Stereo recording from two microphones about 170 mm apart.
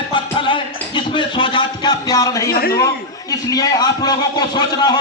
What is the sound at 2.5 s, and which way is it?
Speech, 65° left (ahead or behind).